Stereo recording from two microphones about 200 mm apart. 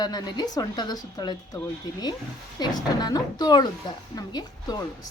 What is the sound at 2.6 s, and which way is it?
A woman's voice, 20° left (ahead or behind).